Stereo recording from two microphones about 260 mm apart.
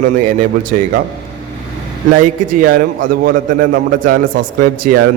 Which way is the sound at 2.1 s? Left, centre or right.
Right.